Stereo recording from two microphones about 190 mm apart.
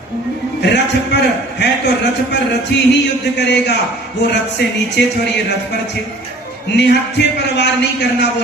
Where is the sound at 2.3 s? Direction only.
65° left (ahead or behind).